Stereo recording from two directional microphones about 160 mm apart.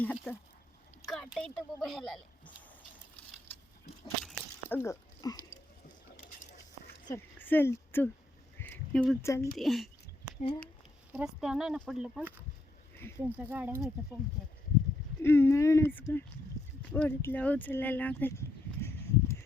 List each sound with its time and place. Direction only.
0.0 s speech: 10° left (ahead or behind)
4.7 s speech: 15° left (ahead or behind)
7.1 s speech: 10° left (ahead or behind)
8.5 s a sound: 10° left (ahead or behind)
9.2 s speech: 15° left (ahead or behind)
9.6 s speech: centre (ahead or behind)
11.1 s speech: 5° right (ahead or behind)
15.2 s speech: 15° left (ahead or behind)